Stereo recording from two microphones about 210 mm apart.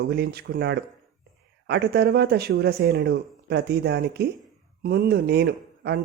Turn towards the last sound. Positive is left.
turn(degrees=-50)  # may be behind; listen again after turning